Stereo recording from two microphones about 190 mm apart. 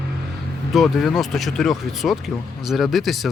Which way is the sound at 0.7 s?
Centre (ahead or behind).